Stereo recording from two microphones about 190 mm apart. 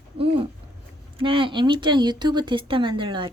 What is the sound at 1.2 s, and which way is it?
Speech, 30° right (ahead or behind).